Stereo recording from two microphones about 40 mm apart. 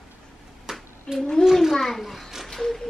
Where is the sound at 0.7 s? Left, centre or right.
Centre.